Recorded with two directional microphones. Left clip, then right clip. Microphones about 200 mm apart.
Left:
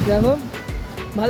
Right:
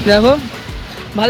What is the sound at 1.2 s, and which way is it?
Speech, 10° right (ahead or behind).